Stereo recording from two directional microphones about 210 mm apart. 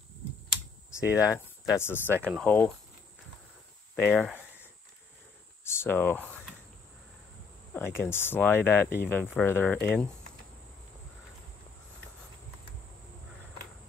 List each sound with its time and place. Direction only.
1.1 s speech: 15° left (ahead or behind)
2.0 s speech: 10° right (ahead or behind)
2.4 s speech: 10° left (ahead or behind)
3.9 s speech: 5° left (ahead or behind)
5.6 s speech: 10° left (ahead or behind)
7.7 s speech: 10° left (ahead or behind)